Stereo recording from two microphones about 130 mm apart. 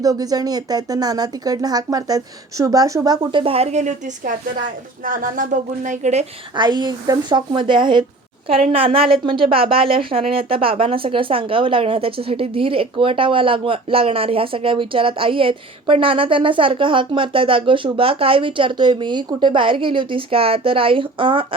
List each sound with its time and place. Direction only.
0.0 s speech: 30° right (ahead or behind)
3.4 s a woman's voice: 50° right (ahead or behind); by 4.4 s 80° right
5.0 s speech: 90° right; by 6.2 s 65° right (ahead or behind)
6.5 s speech: 35° right (ahead or behind)